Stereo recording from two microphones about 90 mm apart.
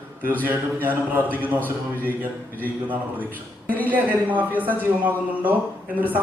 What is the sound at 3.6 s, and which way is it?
Speech, 20° left (ahead or behind).